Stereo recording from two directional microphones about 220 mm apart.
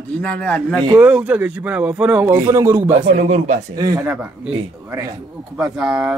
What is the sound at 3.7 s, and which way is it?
Speech, 15° right (ahead or behind).